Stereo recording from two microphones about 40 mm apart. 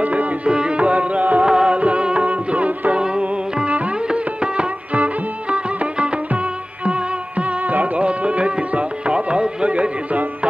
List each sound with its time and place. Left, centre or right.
0.0 s music: right
0.5 s music: right
1.4 s music: right
3.0 s music: right